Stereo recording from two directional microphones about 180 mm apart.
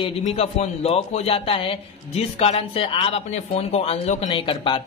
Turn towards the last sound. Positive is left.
turn(degrees=30)  # may be behind; listen again after turning